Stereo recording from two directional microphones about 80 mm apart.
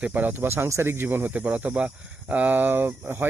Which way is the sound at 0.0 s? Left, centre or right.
Right.